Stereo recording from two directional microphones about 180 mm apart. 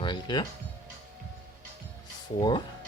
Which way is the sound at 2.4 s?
25° left (ahead or behind).